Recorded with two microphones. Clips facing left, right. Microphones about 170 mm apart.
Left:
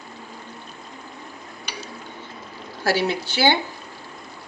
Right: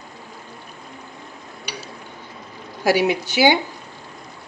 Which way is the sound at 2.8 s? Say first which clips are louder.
Right 4 dB; 15° right (ahead or behind).